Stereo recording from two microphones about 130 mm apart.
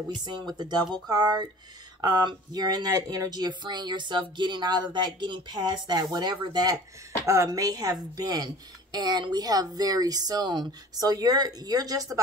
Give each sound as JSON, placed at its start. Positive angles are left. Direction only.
{"t": 0.2, "sound": "speech", "side_deg": -35}